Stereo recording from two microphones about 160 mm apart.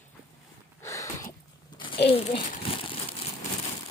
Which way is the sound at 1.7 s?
30° left (ahead or behind).